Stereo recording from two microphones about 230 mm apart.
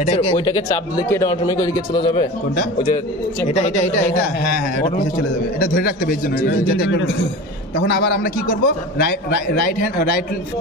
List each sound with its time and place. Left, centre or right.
0.0 s speech: left
2.5 s a man's voice: left
8.2 s a man's voice: left